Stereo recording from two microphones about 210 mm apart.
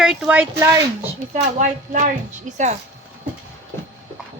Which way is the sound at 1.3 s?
35° right (ahead or behind).